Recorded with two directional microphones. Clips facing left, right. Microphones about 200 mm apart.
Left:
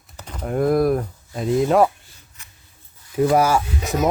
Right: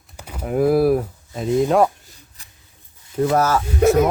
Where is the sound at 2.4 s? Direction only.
35° right (ahead or behind).